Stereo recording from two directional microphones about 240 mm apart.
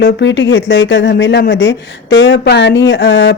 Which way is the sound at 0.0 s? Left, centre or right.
Left.